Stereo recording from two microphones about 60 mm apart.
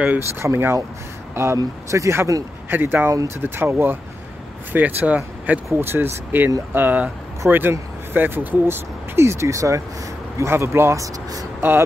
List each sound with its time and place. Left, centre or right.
0.4 s speech: right
2.7 s speech: right
4.7 s speech: right
5.7 s speech: right